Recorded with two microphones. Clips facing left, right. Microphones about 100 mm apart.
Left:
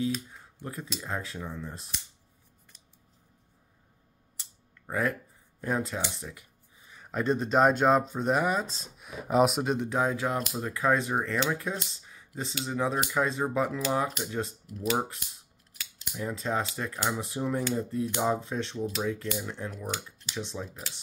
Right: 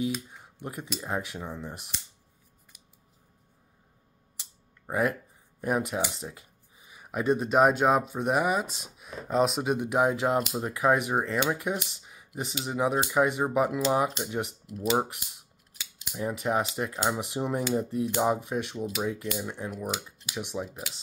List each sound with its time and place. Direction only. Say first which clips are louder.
0.6 s speech: right 2 dB; 20° right (ahead or behind)
4.8 s speech: right 2 dB; 20° right (ahead or behind)
6.1 s a sound: right 2 dB; 25° right (ahead or behind)
6.9 s speech: right 2 dB; 10° right (ahead or behind)
8.9 s speech: left 2 dB; 5° left (ahead or behind)
9.8 s speech: right 3 dB; 20° right (ahead or behind)
14.9 s scissors: right 2 dB; 20° right (ahead or behind)
17.2 s speech: right 1 dB; 20° right (ahead or behind)